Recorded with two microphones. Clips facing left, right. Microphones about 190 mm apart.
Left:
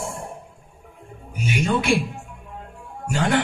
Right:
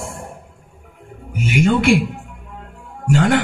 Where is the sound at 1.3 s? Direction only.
65° right (ahead or behind).